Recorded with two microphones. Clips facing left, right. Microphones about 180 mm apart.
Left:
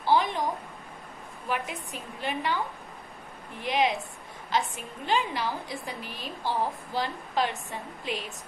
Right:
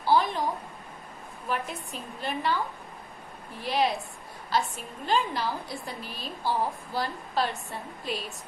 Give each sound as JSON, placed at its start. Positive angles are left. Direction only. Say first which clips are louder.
{"t": 0.0, "sound": "a sound", "louder": "even", "side_deg": 15}
{"t": 1.5, "sound": "a woman's voice", "louder": "even", "side_deg": 15}
{"t": 3.6, "sound": "a woman's voice", "louder": "even", "side_deg": 15}